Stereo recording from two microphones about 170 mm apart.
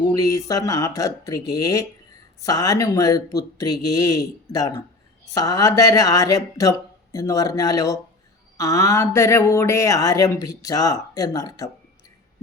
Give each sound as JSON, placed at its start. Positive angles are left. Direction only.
{"t": 0.1, "sound": "speech", "side_deg": 20}